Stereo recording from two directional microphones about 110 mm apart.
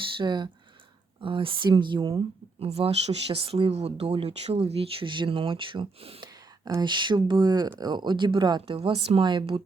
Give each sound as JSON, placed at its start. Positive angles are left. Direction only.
{"t": 0.0, "sound": "speech", "side_deg": -45}
{"t": 2.6, "sound": "speech", "side_deg": -70}
{"t": 6.7, "sound": "speech", "side_deg": -45}
{"t": 8.8, "sound": "speech", "side_deg": -65}
{"t": 9.2, "sound": "speech", "side_deg": -45}